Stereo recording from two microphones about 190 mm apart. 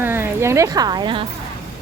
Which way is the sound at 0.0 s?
10° right (ahead or behind).